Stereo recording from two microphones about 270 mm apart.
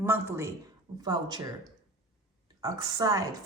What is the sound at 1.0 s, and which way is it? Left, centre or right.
Speech, centre.